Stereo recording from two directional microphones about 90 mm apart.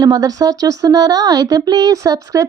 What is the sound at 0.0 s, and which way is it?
A woman's voice, 45° right (ahead or behind).